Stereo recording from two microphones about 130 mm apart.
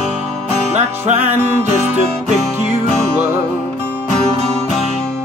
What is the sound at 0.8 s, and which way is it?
Music, 60° right (ahead or behind).